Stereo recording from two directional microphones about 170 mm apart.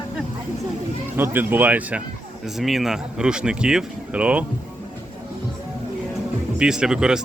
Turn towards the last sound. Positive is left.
turn(degrees=-5)  # may be behind; listen again after turning